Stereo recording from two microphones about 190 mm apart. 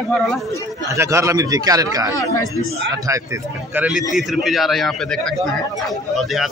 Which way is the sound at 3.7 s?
5° right (ahead or behind).